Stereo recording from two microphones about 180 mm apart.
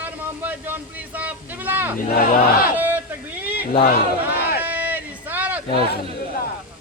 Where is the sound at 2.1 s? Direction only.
55° left (ahead or behind).